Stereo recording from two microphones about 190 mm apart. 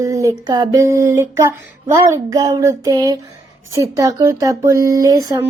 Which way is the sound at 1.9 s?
20° right (ahead or behind).